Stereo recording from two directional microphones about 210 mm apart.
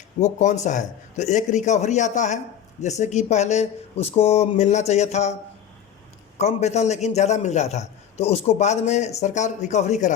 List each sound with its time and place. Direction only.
0.2 s a man's voice: 35° left (ahead or behind)